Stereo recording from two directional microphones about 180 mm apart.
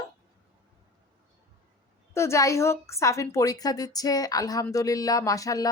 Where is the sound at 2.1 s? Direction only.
15° left (ahead or behind).